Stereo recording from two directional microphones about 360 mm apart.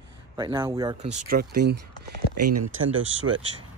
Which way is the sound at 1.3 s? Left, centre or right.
Right.